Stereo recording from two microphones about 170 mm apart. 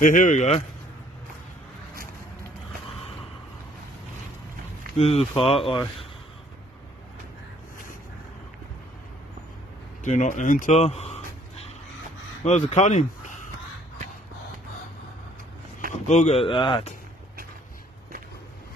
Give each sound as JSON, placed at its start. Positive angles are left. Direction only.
{"t": 0.0, "sound": "speech", "side_deg": 50}
{"t": 2.9, "sound": "a sound", "side_deg": 35}
{"t": 4.9, "sound": "speech", "side_deg": 35}
{"t": 10.0, "sound": "speech", "side_deg": 45}
{"t": 12.4, "sound": "speech", "side_deg": 40}
{"t": 16.1, "sound": "speech", "side_deg": 40}